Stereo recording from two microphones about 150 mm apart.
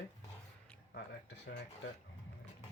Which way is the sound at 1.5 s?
90° left.